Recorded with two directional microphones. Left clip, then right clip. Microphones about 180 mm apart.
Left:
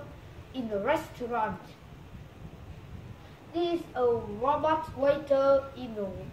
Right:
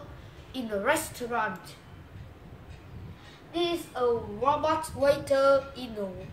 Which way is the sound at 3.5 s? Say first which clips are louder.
Right 1 dB; 5° right (ahead or behind).